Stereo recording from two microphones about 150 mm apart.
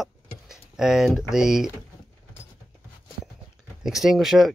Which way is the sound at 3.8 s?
Centre (ahead or behind).